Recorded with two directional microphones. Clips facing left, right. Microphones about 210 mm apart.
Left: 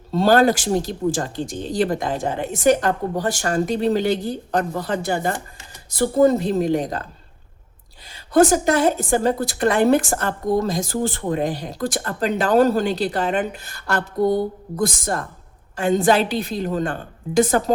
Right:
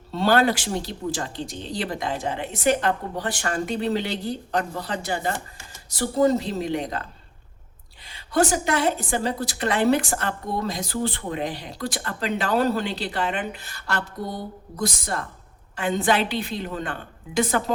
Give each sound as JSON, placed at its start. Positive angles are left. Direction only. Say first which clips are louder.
{"t": 0.1, "sound": "a woman's voice", "louder": "left 5 dB", "side_deg": 40}